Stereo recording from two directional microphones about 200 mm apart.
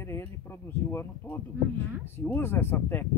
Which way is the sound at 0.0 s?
10° left (ahead or behind).